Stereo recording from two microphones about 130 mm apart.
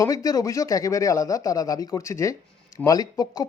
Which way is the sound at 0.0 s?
25° left (ahead or behind).